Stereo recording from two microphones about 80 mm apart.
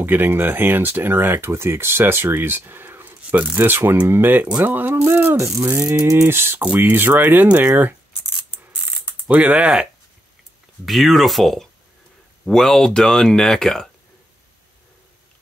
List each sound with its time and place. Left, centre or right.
0.0 s speech: right
5.8 s a sound: centre
6.0 s a sound: right
6.3 s speech: right
9.3 s speech: centre
10.9 s speech: centre